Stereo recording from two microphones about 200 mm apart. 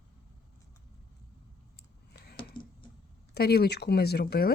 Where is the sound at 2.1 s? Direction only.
50° left (ahead or behind).